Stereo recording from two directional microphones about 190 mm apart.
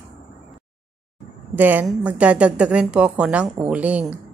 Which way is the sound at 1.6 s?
10° right (ahead or behind).